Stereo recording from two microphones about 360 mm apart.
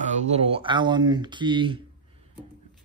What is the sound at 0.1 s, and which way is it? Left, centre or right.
A man's voice, centre.